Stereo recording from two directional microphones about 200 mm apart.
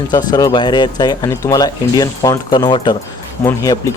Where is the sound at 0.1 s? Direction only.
20° left (ahead or behind).